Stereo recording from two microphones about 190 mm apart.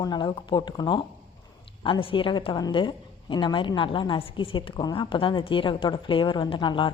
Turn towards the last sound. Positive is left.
turn(degrees=25)  # may be behind; listen again after turning